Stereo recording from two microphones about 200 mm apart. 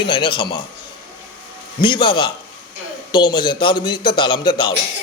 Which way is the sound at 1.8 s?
25° left (ahead or behind).